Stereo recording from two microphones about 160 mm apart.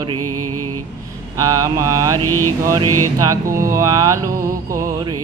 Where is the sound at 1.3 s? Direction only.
20° right (ahead or behind).